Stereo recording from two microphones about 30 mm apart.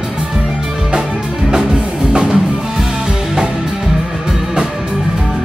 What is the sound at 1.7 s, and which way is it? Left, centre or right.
Music, right.